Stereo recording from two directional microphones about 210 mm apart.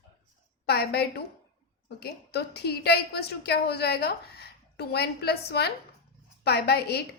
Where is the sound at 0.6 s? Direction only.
50° left (ahead or behind).